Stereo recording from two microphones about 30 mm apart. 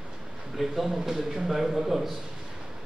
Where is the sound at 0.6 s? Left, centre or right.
Centre.